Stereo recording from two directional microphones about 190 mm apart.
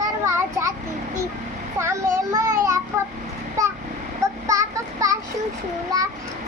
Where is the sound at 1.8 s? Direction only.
15° right (ahead or behind).